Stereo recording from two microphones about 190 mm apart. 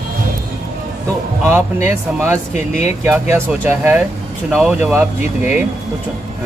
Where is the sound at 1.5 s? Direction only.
10° right (ahead or behind).